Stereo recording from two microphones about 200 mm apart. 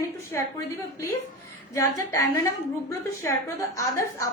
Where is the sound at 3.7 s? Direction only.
15° left (ahead or behind).